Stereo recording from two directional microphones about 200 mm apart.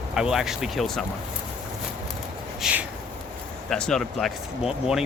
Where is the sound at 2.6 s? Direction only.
5° right (ahead or behind).